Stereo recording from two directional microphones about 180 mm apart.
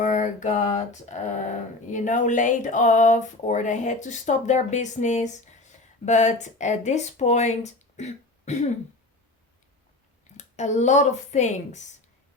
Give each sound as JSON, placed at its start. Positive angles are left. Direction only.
{"t": 0.0, "sound": "a sound", "side_deg": 45}
{"t": 6.1, "sound": "speech", "side_deg": 40}
{"t": 10.3, "sound": "speech", "side_deg": 40}